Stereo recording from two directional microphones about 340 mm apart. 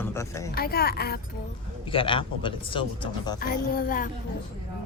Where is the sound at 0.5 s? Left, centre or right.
Left.